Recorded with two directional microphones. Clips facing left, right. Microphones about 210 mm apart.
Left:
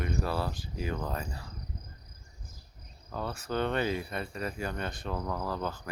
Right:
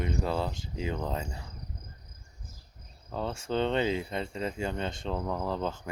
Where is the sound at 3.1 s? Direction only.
25° right (ahead or behind).